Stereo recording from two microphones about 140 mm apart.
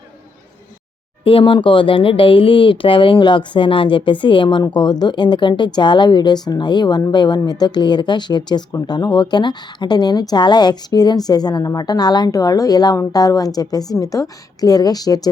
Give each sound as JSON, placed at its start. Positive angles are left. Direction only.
{"t": 1.2, "sound": "a woman's voice", "side_deg": 40}